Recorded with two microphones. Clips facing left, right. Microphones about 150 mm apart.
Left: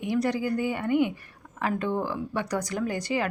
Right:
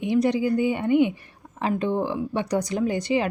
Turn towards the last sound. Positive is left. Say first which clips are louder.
# right 5 dB
turn(degrees=-20)  # may be behind; listen again after turning